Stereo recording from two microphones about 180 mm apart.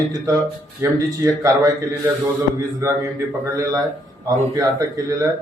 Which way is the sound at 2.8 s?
15° right (ahead or behind).